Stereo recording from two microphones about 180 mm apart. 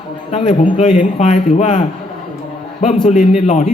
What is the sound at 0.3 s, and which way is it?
A man's voice, 30° left (ahead or behind).